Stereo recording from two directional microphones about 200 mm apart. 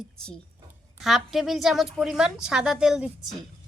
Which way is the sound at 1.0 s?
Centre (ahead or behind).